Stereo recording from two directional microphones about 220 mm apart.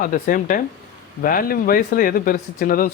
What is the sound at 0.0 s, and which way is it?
Speech, 35° left (ahead or behind).